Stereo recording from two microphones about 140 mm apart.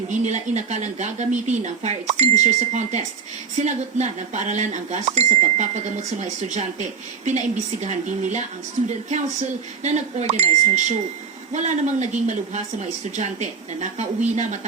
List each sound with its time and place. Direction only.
0.1 s speech: 55° right (ahead or behind)